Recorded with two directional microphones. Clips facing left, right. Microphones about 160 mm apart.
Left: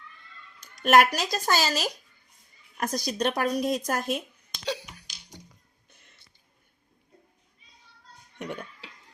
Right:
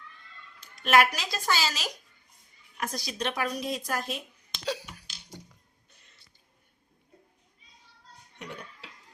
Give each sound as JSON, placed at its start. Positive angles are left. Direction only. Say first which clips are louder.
{"t": 0.6, "sound": "speech", "louder": "left 3 dB", "side_deg": 45}
{"t": 4.5, "sound": "cough", "louder": "left 1 dB", "side_deg": 0}
{"t": 8.4, "sound": "a sound", "louder": "left 6 dB", "side_deg": 50}